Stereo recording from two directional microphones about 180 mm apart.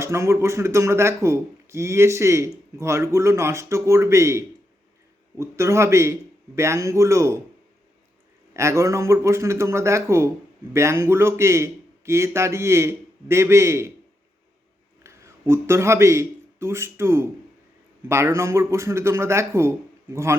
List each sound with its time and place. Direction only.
0.0 s a man's voice: 15° right (ahead or behind)
8.5 s a man's voice: 15° right (ahead or behind)
15.0 s a man's voice: 15° right (ahead or behind)